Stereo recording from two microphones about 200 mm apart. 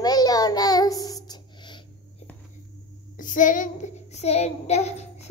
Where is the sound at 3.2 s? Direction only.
40° left (ahead or behind).